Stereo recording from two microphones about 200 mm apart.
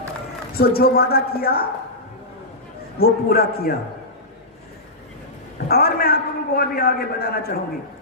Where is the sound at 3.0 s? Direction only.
50° left (ahead or behind).